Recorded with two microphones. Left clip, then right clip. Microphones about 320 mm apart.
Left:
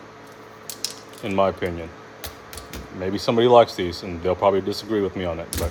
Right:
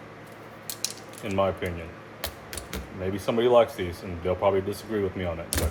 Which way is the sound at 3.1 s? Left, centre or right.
Left.